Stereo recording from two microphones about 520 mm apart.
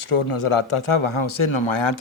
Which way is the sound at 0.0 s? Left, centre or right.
Left.